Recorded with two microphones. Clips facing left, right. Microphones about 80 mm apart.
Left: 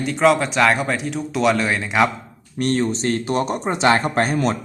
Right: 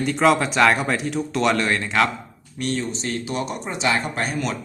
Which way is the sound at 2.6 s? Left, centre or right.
Left.